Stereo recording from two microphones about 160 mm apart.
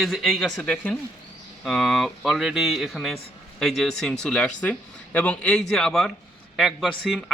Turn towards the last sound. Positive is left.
turn(degrees=0)  # may be behind; listen again after turning